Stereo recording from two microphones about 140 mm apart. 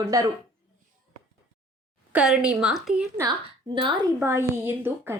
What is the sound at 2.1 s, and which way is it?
Speech, 5° right (ahead or behind).